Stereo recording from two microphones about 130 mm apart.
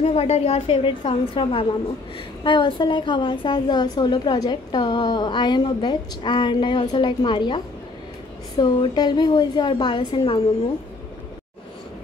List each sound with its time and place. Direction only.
0.0 s a woman's voice: 50° left (ahead or behind)